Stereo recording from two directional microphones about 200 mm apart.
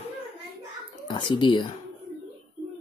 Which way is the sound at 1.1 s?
25° left (ahead or behind).